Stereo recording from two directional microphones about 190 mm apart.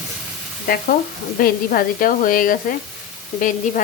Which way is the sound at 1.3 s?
50° left (ahead or behind).